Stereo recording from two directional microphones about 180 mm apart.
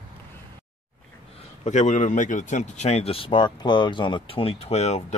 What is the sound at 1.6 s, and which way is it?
Speech, 40° left (ahead or behind).